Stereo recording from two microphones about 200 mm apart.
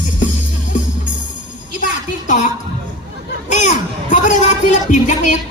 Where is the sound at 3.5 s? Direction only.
35° left (ahead or behind).